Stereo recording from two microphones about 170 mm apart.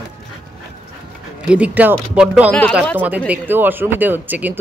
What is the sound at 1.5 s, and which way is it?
Speech, 10° right (ahead or behind).